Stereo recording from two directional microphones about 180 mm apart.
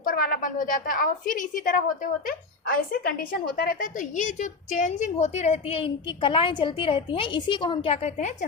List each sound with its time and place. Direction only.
0.0 s a woman's voice: 50° left (ahead or behind)